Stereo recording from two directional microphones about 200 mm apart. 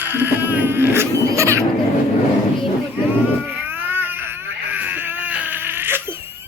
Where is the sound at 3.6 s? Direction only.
10° right (ahead or behind).